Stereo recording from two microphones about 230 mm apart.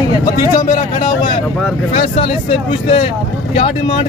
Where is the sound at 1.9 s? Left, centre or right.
Left.